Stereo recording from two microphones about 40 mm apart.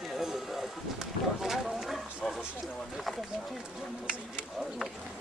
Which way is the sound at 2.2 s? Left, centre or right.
Centre.